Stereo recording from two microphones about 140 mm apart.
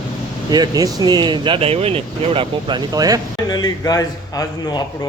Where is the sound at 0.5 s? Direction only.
30° right (ahead or behind).